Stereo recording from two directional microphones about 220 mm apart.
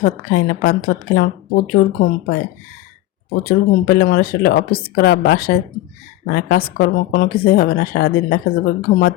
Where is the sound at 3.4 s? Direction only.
45° left (ahead or behind).